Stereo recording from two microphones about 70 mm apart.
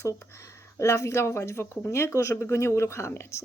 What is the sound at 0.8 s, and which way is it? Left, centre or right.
Speech, left.